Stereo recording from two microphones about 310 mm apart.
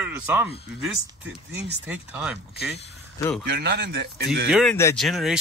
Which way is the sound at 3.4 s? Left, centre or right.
Right.